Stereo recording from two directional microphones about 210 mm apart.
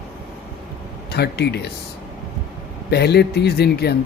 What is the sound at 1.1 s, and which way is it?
Speech, 50° left (ahead or behind).